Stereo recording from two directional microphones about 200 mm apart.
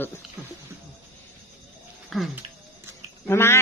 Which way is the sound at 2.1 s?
Centre (ahead or behind).